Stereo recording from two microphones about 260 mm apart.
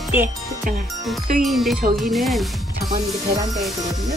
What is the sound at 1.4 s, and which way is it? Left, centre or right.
Speech, centre.